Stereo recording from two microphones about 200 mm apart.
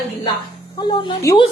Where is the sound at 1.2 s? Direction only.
15° left (ahead or behind).